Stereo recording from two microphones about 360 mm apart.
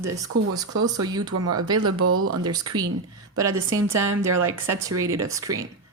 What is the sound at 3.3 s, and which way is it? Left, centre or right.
Speech, centre.